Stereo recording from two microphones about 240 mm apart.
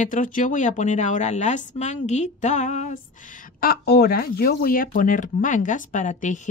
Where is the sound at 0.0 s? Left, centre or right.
Left.